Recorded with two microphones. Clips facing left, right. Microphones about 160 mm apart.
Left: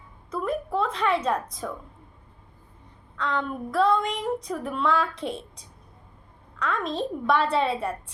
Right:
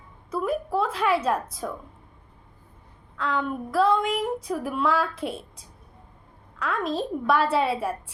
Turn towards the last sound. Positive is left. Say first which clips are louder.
# right 1 dB
turn(degrees=-5)  # may be behind; listen again after turning